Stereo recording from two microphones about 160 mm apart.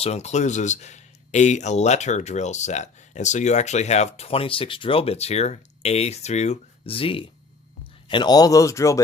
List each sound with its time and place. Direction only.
0.0 s speech: 45° left (ahead or behind); by 9.0 s 20° left (ahead or behind)